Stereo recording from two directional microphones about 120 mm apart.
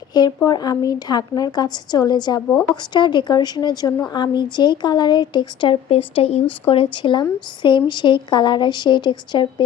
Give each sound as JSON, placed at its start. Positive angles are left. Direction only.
{"t": 0.1, "sound": "speech", "side_deg": 35}